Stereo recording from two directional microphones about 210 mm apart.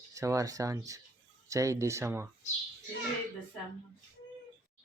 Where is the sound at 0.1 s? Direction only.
15° right (ahead or behind).